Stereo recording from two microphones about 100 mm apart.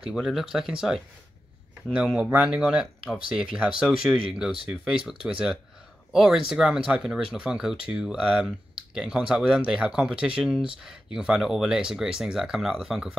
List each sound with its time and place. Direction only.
0.0 s speech: 5° right (ahead or behind)
2.1 s speech: 10° right (ahead or behind)